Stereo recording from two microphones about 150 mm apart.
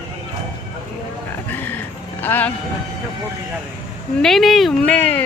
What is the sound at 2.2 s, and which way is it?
Speech, 10° left (ahead or behind).